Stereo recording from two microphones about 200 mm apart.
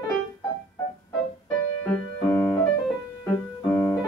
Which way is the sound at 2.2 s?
15° left (ahead or behind).